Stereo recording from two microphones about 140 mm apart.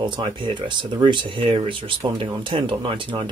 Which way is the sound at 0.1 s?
35° right (ahead or behind).